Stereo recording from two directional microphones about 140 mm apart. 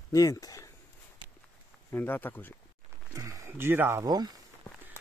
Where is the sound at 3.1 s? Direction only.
20° right (ahead or behind).